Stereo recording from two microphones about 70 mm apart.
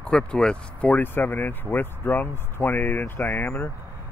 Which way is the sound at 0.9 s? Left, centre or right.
Left.